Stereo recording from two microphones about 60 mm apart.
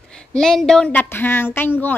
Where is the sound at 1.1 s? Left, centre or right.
Left.